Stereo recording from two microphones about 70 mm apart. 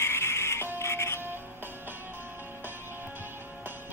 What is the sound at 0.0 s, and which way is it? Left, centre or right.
Music, left.